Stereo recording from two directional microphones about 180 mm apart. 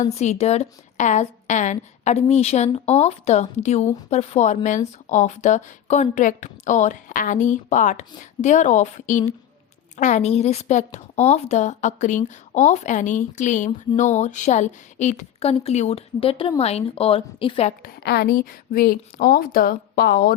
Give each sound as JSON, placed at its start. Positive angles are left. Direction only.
{"t": 0.0, "sound": "a woman's voice", "side_deg": 40}
{"t": 17.8, "sound": "a woman's voice", "side_deg": 65}